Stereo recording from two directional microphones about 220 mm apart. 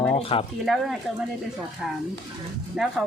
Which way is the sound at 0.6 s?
Centre (ahead or behind).